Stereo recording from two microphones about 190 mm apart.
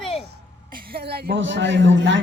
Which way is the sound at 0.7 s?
55° right (ahead or behind).